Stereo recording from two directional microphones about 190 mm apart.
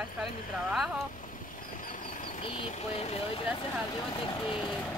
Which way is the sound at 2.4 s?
30° left (ahead or behind).